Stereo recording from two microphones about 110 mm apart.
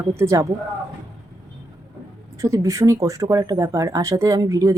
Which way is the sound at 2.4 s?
30° right (ahead or behind).